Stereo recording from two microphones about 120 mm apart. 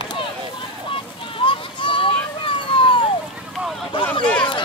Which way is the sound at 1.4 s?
45° left (ahead or behind).